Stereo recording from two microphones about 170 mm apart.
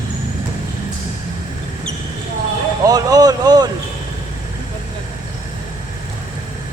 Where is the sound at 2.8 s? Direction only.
20° right (ahead or behind).